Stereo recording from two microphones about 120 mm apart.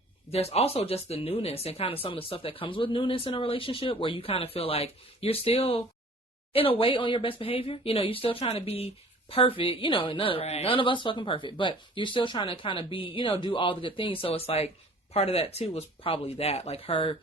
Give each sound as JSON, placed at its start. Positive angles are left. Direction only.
{"t": 0.3, "sound": "speech", "side_deg": 55}